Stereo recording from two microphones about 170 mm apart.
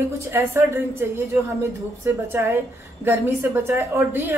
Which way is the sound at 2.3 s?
15° right (ahead or behind).